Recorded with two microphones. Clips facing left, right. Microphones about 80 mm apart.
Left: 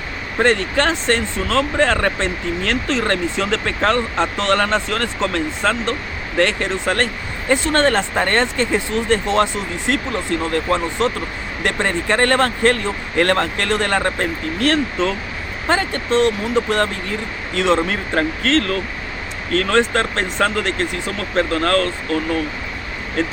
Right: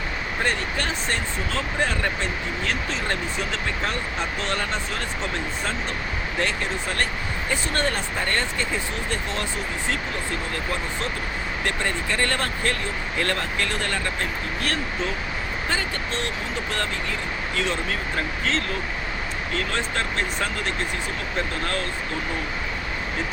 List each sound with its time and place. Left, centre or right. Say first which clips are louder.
0.3 s speech: left 11 dB; left
6.3 s speech: left 9 dB; left
11.6 s speech: left 8 dB; left
13.8 s speech: left 8 dB; left